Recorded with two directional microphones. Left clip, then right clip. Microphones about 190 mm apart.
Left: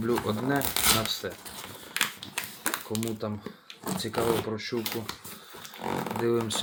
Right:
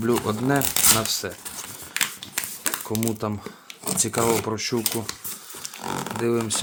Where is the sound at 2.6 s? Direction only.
10° right (ahead or behind).